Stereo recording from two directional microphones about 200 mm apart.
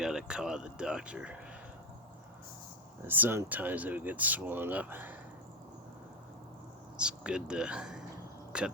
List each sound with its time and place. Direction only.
0.0 s speech: 5° right (ahead or behind)
3.1 s speech: 10° right (ahead or behind)
6.9 s speech: 5° right (ahead or behind)